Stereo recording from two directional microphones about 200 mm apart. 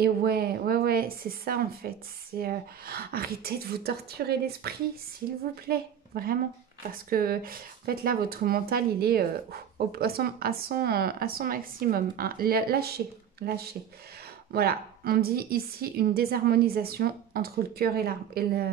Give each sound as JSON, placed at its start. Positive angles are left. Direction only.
{"t": 0.0, "sound": "a woman's voice", "side_deg": -50}